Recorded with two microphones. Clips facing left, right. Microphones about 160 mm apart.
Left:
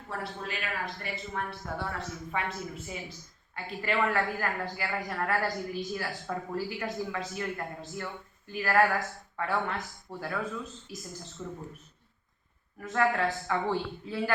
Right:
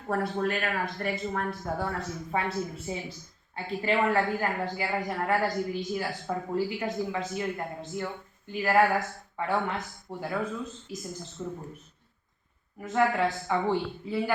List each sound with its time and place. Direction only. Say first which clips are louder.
0.1 s speech: right 9 dB; 50° right (ahead or behind)
2.9 s a man's voice: right 5 dB; 30° right (ahead or behind)
12.8 s a man's voice: right 2 dB; 15° right (ahead or behind)